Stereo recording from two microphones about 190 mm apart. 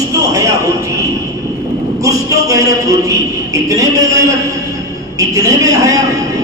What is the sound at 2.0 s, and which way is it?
A man's voice, 15° right (ahead or behind).